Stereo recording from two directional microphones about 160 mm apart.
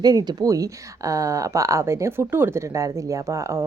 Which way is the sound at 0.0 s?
25° right (ahead or behind).